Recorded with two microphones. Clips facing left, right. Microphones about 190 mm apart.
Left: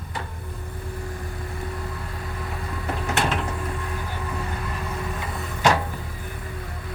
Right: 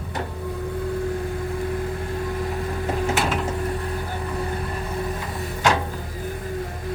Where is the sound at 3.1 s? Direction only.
5° right (ahead or behind).